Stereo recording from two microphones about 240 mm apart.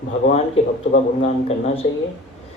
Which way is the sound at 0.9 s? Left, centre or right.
Left.